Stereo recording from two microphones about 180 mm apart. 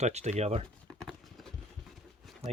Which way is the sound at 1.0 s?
Centre (ahead or behind).